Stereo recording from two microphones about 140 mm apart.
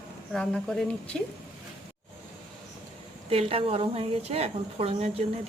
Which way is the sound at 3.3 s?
40° right (ahead or behind).